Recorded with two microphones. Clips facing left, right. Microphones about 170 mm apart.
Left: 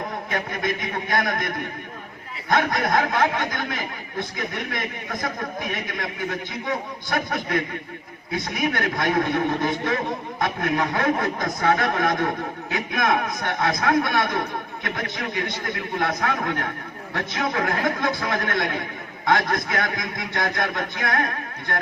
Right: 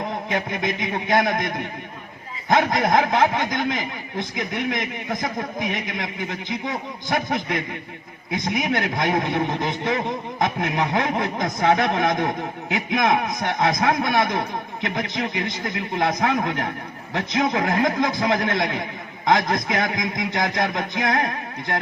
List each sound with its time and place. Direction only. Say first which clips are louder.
0.3 s a man's voice: right 1 dB; 20° right (ahead or behind)